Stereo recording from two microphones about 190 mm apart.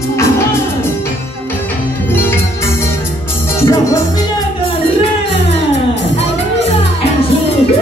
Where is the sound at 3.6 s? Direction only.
15° left (ahead or behind).